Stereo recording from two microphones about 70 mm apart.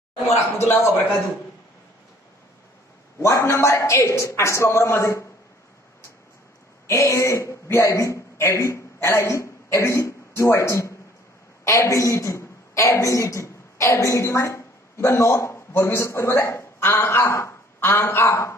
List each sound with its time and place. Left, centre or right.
0.6 s a man's voice: left
3.2 s a man's voice: left
6.9 s a man's voice: left